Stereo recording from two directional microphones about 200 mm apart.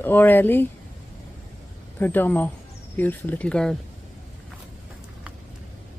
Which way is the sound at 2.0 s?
10° left (ahead or behind).